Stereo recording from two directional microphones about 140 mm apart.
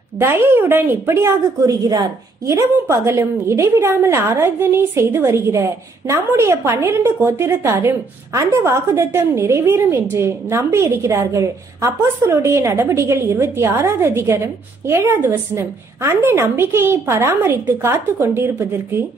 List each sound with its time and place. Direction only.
0.2 s a woman's voice: 15° right (ahead or behind)